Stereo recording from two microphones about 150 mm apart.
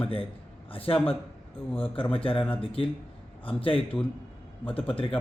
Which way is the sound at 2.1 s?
35° left (ahead or behind).